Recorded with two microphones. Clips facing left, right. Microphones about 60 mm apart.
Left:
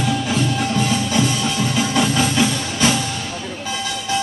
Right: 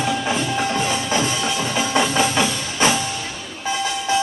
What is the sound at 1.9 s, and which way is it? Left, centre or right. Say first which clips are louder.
Music: even; right.